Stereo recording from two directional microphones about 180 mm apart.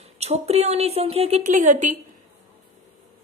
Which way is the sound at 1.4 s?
45° right (ahead or behind).